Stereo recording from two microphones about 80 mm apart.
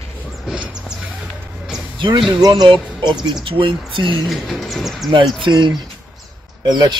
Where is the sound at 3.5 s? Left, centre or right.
Right.